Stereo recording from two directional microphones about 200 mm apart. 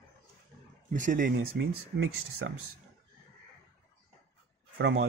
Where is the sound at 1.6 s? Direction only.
70° right (ahead or behind).